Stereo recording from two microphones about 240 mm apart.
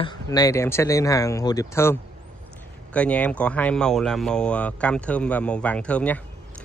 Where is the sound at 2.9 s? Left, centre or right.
Centre.